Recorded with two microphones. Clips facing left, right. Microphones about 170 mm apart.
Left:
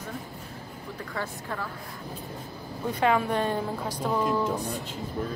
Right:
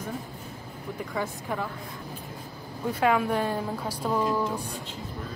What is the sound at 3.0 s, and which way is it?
A woman's voice, 5° right (ahead or behind).